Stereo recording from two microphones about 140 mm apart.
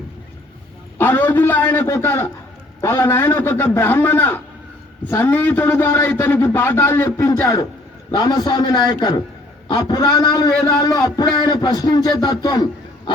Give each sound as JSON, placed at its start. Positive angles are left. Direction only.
{"t": 0.9, "sound": "a man's voice", "side_deg": 15}